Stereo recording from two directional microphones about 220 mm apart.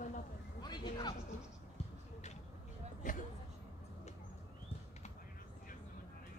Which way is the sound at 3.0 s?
35° left (ahead or behind).